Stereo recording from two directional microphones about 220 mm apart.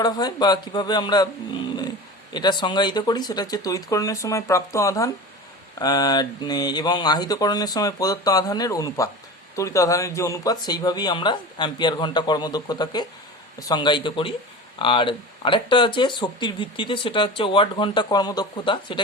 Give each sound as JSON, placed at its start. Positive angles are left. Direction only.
{"t": 0.0, "sound": "speech", "side_deg": 20}
{"t": 2.3, "sound": "speech", "side_deg": 20}